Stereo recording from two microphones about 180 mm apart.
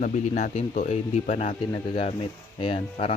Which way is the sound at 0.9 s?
35° left (ahead or behind).